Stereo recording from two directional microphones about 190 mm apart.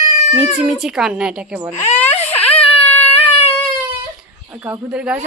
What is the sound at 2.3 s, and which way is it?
Whimper, 30° left (ahead or behind).